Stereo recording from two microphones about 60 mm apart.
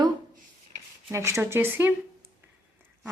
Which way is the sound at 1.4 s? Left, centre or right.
Right.